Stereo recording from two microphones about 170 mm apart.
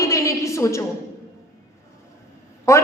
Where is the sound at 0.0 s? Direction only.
20° left (ahead or behind).